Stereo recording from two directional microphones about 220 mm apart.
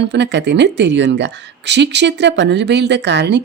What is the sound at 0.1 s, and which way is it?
Speech, 50° right (ahead or behind).